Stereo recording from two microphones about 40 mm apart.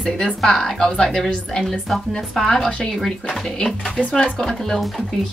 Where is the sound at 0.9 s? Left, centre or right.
Left.